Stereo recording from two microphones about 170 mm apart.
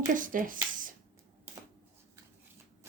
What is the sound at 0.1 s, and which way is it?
Speech, 50° right (ahead or behind).